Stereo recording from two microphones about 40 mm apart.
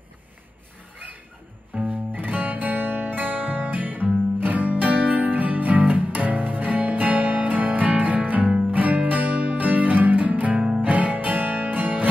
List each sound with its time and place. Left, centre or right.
1.9 s music: right